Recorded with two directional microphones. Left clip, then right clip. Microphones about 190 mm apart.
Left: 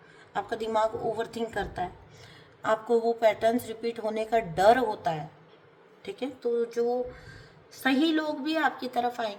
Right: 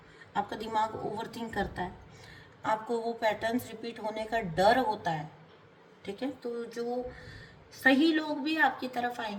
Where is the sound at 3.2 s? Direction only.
35° left (ahead or behind).